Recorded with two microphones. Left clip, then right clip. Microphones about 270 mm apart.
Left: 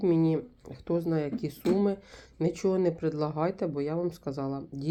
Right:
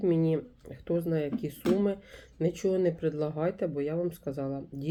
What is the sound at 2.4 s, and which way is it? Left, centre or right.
Speech, centre.